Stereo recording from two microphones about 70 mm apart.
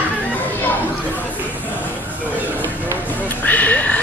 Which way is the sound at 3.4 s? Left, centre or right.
Left.